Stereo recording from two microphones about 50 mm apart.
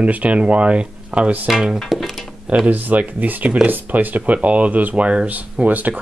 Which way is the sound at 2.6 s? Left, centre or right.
Right.